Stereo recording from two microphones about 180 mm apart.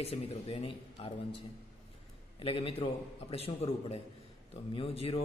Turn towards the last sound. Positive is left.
turn(degrees=30)  # may be behind; listen again after turning